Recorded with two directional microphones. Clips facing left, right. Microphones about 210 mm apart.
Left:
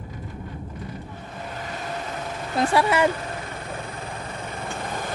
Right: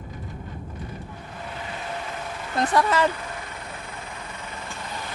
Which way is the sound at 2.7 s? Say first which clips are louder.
Left 1 dB; 10° left (ahead or behind).